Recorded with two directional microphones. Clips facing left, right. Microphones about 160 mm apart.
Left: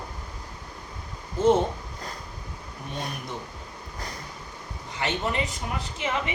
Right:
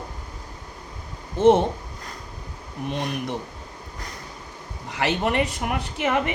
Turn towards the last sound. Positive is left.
turn(degrees=-60)  # may be behind; listen again after turning